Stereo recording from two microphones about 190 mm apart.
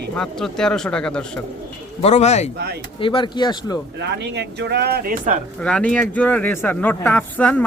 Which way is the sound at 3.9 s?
65° right (ahead or behind).